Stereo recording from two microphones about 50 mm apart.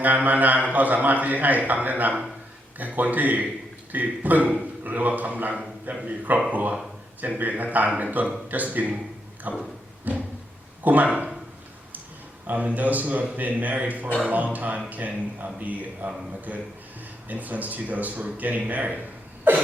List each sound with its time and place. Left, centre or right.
0.0 s a man's voice: right
5.9 s speech: right
6.5 s a man's voice: right
10.1 s a sound: right
10.8 s speech: right
12.5 s a man's voice: right